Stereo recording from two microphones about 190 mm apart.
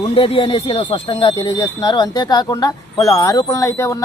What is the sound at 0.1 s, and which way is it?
Speech, 30° left (ahead or behind).